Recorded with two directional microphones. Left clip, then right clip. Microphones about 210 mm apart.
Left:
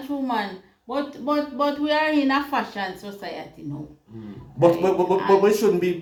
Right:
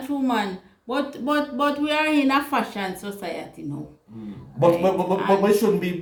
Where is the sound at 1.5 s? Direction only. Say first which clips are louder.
Even; 25° right (ahead or behind).